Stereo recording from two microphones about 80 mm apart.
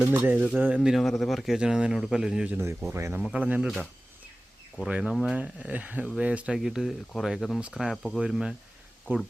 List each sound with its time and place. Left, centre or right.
0.0 s speech: centre
0.8 s speech: centre
2.9 s speech: right
3.3 s speech: centre
4.9 s speech: centre
5.4 s speech: centre
9.1 s speech: right